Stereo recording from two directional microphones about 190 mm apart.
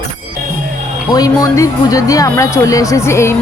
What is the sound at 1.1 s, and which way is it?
Speech, 20° left (ahead or behind).